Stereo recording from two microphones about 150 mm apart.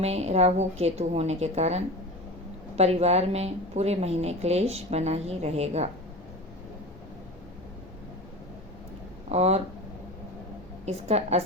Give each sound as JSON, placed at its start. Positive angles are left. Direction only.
{"t": 0.0, "sound": "a woman's voice", "side_deg": -45}
{"t": 9.3, "sound": "a woman's voice", "side_deg": -45}
{"t": 10.8, "sound": "a woman's voice", "side_deg": -45}